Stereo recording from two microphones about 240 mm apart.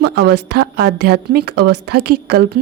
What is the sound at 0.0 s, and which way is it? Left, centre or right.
A woman's voice, right.